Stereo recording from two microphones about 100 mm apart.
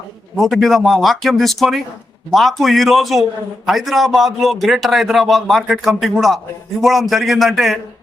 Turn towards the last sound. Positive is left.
turn(degrees=0)  # may be behind; listen again after turning